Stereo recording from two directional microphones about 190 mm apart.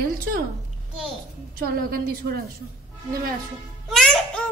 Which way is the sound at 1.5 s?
50° right (ahead or behind).